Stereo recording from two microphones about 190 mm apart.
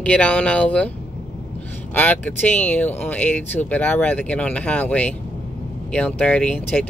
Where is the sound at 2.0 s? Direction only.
10° left (ahead or behind).